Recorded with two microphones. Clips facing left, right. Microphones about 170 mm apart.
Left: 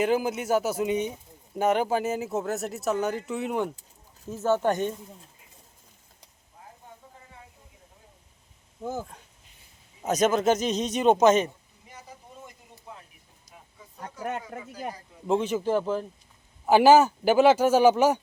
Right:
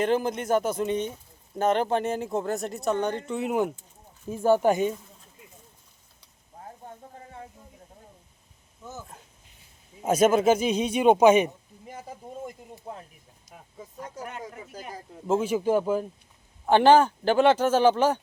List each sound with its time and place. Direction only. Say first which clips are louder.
0.0 s speech: even; 5° left (ahead or behind); by 4.9 s 10° right (ahead or behind)
8.8 s speech: left 9 dB; 55° left (ahead or behind)
10.0 s speech: right 3 dB; 10° right (ahead or behind)
11.9 s a sound: right 7 dB; 50° right (ahead or behind)
14.2 s speech: left 6 dB; 50° left (ahead or behind)
15.3 s speech: right 1 dB; 5° right (ahead or behind)
16.6 s speech: left 1 dB; 5° left (ahead or behind)